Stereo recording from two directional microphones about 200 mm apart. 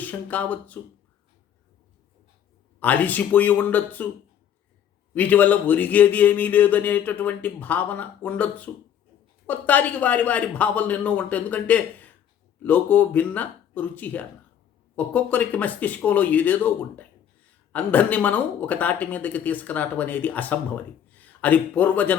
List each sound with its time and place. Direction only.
0.0 s speech: 10° left (ahead or behind)
2.8 s speech: 10° left (ahead or behind)
5.1 s speech: 10° left (ahead or behind)